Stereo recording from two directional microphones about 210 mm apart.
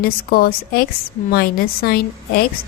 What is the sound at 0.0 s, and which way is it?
A woman's voice, 45° left (ahead or behind).